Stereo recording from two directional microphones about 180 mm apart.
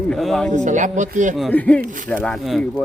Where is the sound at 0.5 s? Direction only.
45° right (ahead or behind).